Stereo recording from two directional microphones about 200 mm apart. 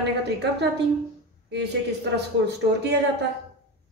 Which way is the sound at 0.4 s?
55° right (ahead or behind).